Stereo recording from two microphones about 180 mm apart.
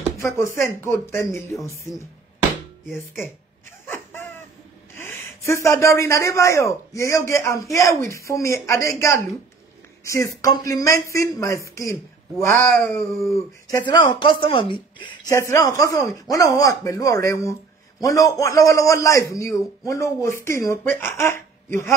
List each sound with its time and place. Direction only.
0.2 s speech: 15° left (ahead or behind)
3.8 s a sound: 10° left (ahead or behind)
4.9 s speech: 10° left (ahead or behind)